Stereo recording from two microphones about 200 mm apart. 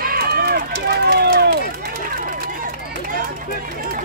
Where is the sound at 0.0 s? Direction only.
50° right (ahead or behind).